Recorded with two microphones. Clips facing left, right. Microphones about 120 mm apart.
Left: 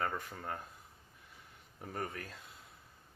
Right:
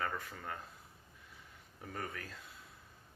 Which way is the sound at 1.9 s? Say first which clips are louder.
Left 3 dB; 40° left (ahead or behind).